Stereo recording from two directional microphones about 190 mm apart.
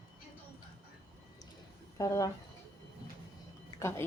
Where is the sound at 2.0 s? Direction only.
15° left (ahead or behind).